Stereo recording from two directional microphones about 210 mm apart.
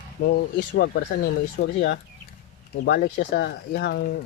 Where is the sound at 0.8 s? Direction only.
50° left (ahead or behind).